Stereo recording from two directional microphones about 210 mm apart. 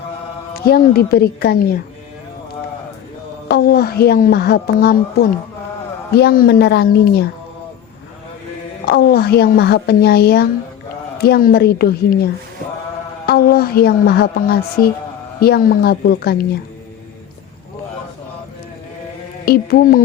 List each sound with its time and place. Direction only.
0.5 s speech: 45° left (ahead or behind)
3.5 s speech: 45° left (ahead or behind)
8.9 s speech: 45° left (ahead or behind)
19.5 s speech: 45° left (ahead or behind)